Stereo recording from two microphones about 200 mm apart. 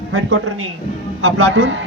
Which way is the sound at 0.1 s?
90° right.